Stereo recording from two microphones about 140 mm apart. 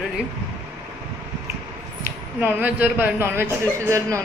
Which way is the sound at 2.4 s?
10° right (ahead or behind).